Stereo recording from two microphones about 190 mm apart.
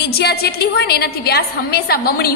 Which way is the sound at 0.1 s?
55° left (ahead or behind).